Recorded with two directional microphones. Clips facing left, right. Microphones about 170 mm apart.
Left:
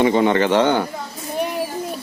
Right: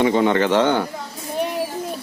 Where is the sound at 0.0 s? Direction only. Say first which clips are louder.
Left 1 dB; 20° left (ahead or behind).